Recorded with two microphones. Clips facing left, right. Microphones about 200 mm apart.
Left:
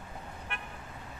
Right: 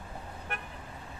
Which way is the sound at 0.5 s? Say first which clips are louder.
Right 4 dB; 40° right (ahead or behind).